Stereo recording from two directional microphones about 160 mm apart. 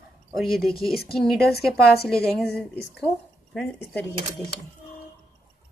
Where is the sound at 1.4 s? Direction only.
80° left.